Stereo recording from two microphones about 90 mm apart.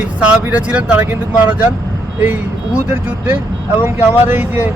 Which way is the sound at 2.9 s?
25° right (ahead or behind).